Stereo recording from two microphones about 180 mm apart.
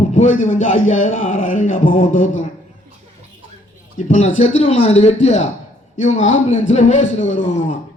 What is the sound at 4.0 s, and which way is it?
A man's voice, 40° left (ahead or behind).